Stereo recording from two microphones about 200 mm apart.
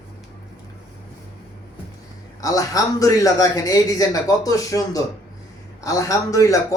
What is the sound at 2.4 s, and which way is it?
Speech, 15° left (ahead or behind).